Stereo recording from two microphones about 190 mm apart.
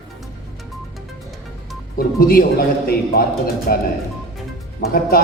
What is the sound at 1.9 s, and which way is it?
Music, 50° left (ahead or behind).